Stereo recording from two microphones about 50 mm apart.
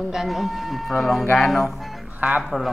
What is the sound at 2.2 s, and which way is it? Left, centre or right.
Speech, right.